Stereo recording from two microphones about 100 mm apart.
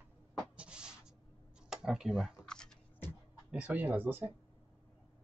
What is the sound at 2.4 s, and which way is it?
Typing, 5° left (ahead or behind).